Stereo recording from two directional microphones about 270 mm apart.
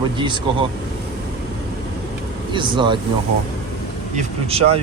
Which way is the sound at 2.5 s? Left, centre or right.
Centre.